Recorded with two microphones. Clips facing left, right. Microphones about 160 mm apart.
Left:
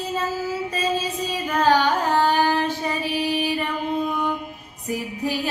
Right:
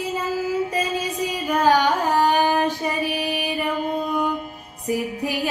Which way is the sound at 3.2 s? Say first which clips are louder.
Left 2 dB; 10° right (ahead or behind).